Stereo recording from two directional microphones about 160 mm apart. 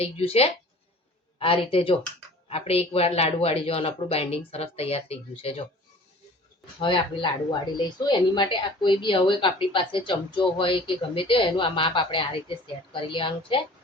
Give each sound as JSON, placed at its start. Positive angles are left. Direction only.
{"t": 0.0, "sound": "a man's voice", "side_deg": 40}
{"t": 6.7, "sound": "a man's voice", "side_deg": 30}